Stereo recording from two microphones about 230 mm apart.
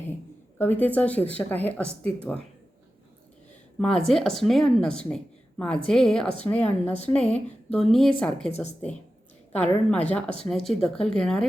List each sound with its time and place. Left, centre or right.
0.6 s a woman's voice: centre
3.8 s speech: centre
7.2 s speech: left
7.7 s speech: centre
8.4 s speech: left
9.5 s speech: centre